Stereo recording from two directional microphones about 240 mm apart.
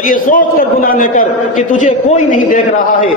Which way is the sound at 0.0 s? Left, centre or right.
Left.